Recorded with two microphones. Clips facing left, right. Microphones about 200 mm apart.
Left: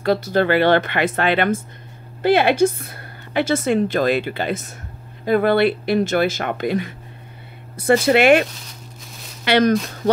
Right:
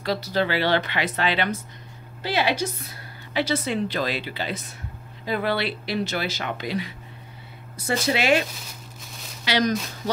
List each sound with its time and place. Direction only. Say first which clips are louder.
0.0 s a woman's voice: left 6 dB; 55° left (ahead or behind)